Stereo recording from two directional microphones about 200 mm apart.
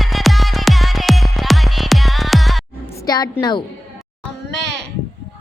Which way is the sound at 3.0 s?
20° left (ahead or behind).